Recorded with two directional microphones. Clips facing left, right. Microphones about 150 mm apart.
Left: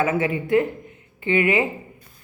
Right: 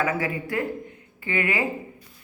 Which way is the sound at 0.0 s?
20° left (ahead or behind).